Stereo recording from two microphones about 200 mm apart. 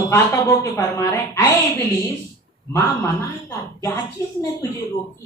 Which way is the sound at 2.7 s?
15° left (ahead or behind).